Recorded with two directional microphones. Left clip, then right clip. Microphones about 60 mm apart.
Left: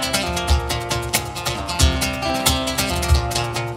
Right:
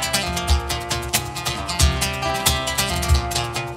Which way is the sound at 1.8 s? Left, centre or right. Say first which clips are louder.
Left 1 dB; left.